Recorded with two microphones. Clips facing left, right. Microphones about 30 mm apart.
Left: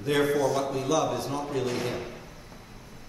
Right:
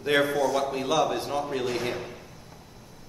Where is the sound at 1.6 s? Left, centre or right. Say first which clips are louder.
Right 1 dB; centre.